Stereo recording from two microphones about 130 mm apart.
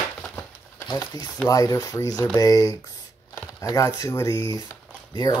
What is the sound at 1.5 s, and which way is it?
Speech, 25° left (ahead or behind).